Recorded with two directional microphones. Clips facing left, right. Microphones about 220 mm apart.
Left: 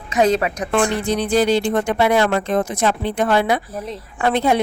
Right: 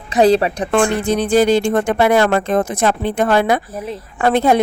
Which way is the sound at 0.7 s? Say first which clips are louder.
Right 3 dB; 50° right (ahead or behind).